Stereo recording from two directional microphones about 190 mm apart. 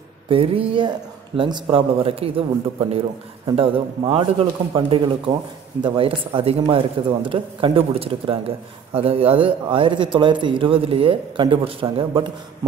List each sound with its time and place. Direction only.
0.3 s speech: 30° right (ahead or behind)
3.4 s speech: 25° right (ahead or behind)